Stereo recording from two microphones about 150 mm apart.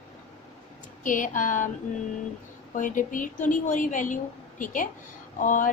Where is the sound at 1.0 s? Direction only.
60° left (ahead or behind).